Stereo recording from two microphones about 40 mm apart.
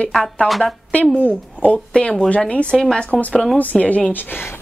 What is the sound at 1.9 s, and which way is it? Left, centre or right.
Speech, left.